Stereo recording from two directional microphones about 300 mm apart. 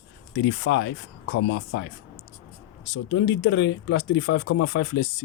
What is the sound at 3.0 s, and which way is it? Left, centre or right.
Speech, left.